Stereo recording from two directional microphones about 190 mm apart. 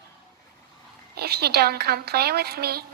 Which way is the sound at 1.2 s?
55° right (ahead or behind).